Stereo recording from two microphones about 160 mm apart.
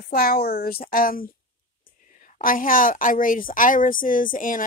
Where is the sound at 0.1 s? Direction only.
70° left (ahead or behind).